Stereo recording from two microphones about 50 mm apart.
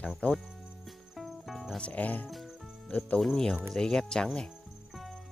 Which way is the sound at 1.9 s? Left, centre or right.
Left.